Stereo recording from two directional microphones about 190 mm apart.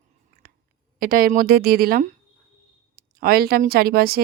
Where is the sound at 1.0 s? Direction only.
50° right (ahead or behind).